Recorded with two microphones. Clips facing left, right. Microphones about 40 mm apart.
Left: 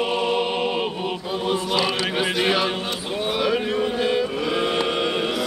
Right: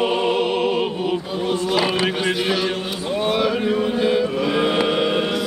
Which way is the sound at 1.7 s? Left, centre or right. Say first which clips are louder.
Right 5 dB; centre.